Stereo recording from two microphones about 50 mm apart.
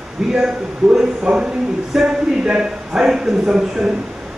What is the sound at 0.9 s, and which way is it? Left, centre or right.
Speech, centre.